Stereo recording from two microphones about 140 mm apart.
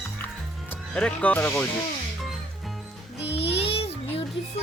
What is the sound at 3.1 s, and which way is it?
Child singing, 45° left (ahead or behind).